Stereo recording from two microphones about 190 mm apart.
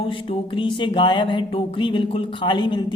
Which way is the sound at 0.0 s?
25° left (ahead or behind).